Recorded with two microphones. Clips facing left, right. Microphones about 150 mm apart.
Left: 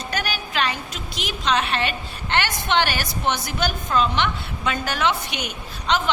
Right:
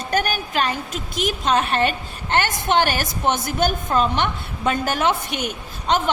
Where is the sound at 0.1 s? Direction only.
50° right (ahead or behind).